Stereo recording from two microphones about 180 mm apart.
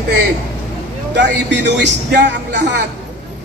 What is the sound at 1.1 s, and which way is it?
A man's voice, 75° right (ahead or behind).